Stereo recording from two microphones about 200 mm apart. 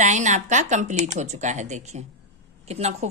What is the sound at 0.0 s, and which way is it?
A woman's voice, 35° right (ahead or behind).